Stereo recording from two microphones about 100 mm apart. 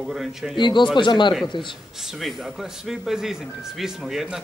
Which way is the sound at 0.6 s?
50° left (ahead or behind).